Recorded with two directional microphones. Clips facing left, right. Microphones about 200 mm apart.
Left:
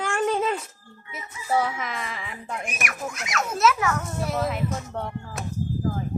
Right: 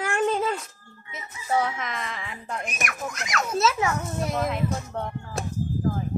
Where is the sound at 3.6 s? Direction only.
25° right (ahead or behind).